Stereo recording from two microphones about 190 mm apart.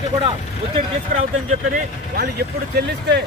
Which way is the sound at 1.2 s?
40° right (ahead or behind).